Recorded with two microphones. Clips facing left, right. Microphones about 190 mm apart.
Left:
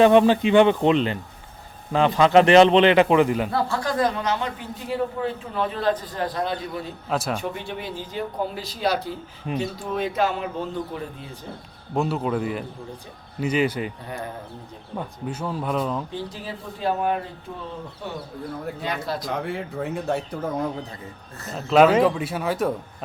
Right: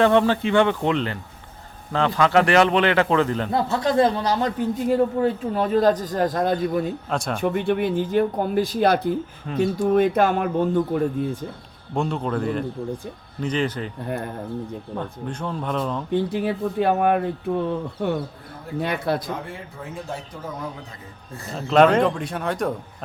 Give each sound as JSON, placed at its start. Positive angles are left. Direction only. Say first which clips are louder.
{"t": 0.0, "sound": "a man's voice", "louder": "left 3 dB", "side_deg": 15}
{"t": 3.5, "sound": "a man's voice", "louder": "right 4 dB", "side_deg": -20}
{"t": 7.1, "sound": "speech", "louder": "even", "side_deg": 5}
{"t": 7.4, "sound": "speech", "louder": "right 9 dB", "side_deg": -55}
{"t": 11.9, "sound": "speech", "louder": "even", "side_deg": 5}
{"t": 14.9, "sound": "speech", "louder": "left 2 dB", "side_deg": 5}
{"t": 16.1, "sound": "speech", "louder": "right 10 dB", "side_deg": -60}
{"t": 19.5, "sound": "speech", "louder": "left 7 dB", "side_deg": 70}
{"t": 21.5, "sound": "speech", "louder": "even", "side_deg": 5}